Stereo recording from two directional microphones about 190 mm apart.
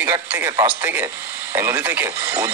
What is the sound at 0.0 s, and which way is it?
A man's voice, 10° right (ahead or behind).